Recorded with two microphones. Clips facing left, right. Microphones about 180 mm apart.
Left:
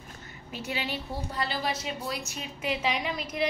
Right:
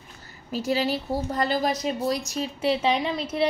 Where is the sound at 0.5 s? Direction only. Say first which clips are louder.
Right 9 dB; 35° right (ahead or behind).